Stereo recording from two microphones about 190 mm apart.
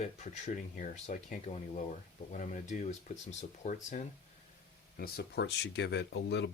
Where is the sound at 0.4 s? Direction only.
40° left (ahead or behind).